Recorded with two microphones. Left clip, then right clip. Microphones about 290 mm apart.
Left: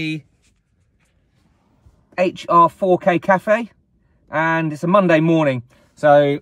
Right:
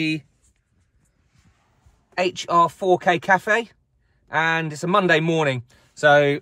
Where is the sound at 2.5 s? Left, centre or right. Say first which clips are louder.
Left 5 dB; right.